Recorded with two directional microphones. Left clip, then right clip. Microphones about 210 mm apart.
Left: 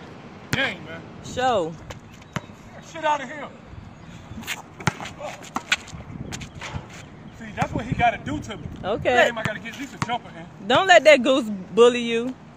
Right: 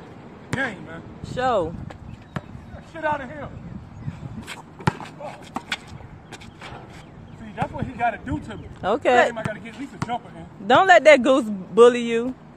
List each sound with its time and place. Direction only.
0.5 s a sound: 10° left (ahead or behind)
1.2 s speech: centre (ahead or behind)
2.3 s basketball bounce: 10° left (ahead or behind)
2.9 s speech: 10° left (ahead or behind)
4.8 s a sound: 10° left (ahead or behind)
7.4 s speech: 5° left (ahead or behind)
8.8 s speech: 25° right (ahead or behind)